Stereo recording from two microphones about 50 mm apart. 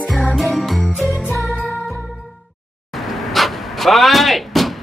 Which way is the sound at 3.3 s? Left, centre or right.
Centre.